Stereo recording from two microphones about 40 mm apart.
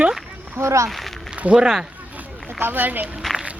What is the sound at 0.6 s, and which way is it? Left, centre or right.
Speech, right.